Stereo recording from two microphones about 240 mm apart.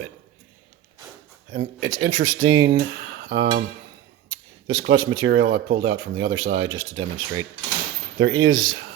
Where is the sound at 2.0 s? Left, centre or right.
Right.